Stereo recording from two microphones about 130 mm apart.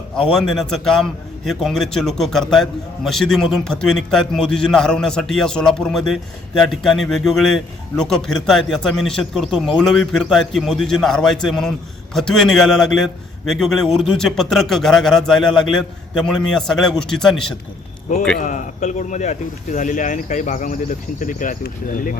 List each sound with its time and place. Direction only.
0.2 s a man's voice: centre (ahead or behind)
18.3 s speech: 75° left (ahead or behind)